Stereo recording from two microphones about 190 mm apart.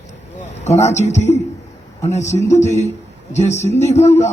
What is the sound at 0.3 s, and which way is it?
A man's voice, 35° left (ahead or behind).